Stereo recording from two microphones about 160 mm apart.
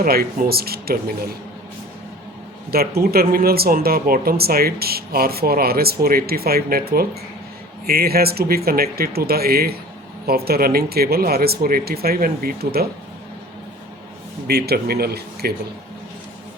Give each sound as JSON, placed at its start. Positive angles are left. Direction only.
{"t": 0.0, "sound": "speech", "side_deg": -65}
{"t": 2.6, "sound": "speech", "side_deg": -75}
{"t": 14.4, "sound": "speech", "side_deg": -75}